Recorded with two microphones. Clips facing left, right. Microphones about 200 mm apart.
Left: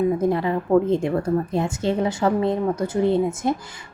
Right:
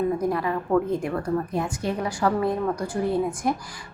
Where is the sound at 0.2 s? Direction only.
25° left (ahead or behind).